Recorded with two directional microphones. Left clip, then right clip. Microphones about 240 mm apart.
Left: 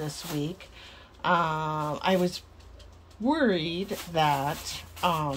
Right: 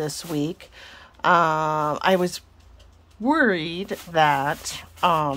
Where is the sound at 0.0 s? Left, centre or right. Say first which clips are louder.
Right 7 dB; right.